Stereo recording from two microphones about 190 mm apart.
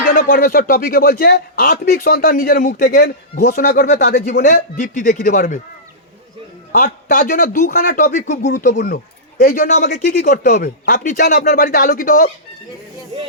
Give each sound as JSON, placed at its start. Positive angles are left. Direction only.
{"t": 0.0, "sound": "speech", "side_deg": 50}
{"t": 6.7, "sound": "speech", "side_deg": 45}
{"t": 8.7, "sound": "speech", "side_deg": 60}
{"t": 9.4, "sound": "speech", "side_deg": 45}